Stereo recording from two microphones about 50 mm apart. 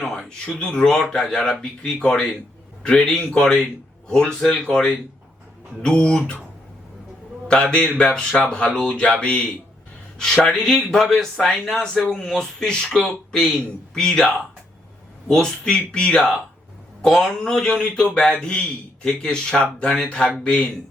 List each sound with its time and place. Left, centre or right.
0.0 s speech: centre
1.8 s speech: left
7.4 s a man's voice: centre
10.2 s speech: centre
17.0 s speech: centre